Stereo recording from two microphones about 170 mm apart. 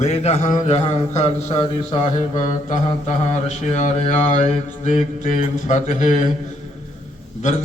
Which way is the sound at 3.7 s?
45° left (ahead or behind).